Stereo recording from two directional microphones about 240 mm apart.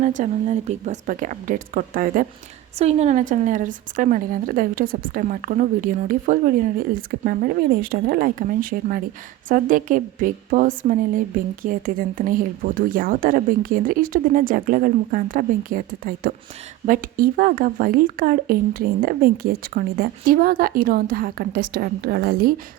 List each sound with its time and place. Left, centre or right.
0.0 s speech: right